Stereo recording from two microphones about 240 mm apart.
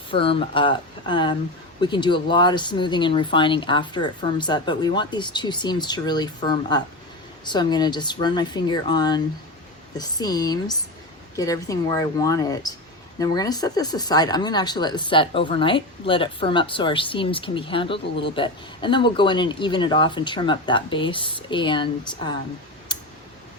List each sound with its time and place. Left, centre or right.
0.1 s speech: left